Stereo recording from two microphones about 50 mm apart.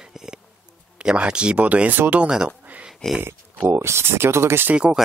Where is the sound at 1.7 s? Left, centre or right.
Right.